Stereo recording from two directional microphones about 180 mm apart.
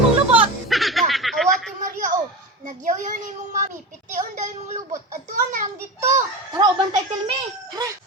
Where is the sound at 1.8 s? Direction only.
45° right (ahead or behind).